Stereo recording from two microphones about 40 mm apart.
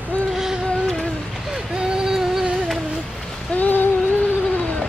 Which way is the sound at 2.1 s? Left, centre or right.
Centre.